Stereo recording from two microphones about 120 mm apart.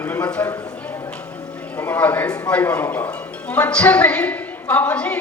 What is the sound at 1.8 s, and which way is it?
A woman's voice, 15° left (ahead or behind).